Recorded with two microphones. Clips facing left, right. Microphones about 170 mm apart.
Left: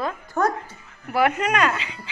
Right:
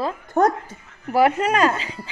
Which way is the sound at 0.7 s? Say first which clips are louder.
Right 4 dB; 40° right (ahead or behind).